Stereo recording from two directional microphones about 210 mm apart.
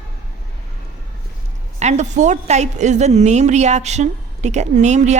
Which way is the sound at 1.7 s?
35° right (ahead or behind).